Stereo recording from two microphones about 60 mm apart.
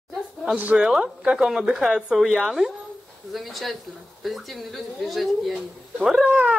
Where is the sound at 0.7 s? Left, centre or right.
Centre.